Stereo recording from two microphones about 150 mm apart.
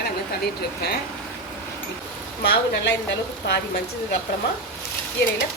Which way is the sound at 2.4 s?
90° left.